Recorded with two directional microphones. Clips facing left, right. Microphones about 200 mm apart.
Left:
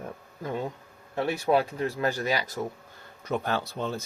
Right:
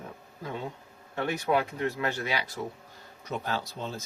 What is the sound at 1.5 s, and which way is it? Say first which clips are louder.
Speech: left 3 dB; 35° left (ahead or behind).